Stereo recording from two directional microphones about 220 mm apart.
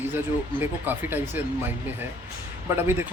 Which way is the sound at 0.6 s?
10° right (ahead or behind).